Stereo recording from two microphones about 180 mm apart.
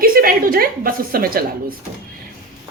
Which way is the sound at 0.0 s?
55° right (ahead or behind).